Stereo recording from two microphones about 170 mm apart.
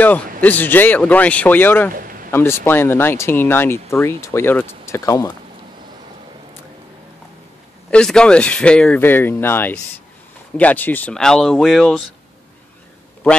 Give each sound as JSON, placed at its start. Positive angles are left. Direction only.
{"t": 0.4, "sound": "speech", "side_deg": 10}
{"t": 2.0, "sound": "a sound", "side_deg": -55}
{"t": 2.3, "sound": "speech", "side_deg": 15}
{"t": 7.9, "sound": "speech", "side_deg": 5}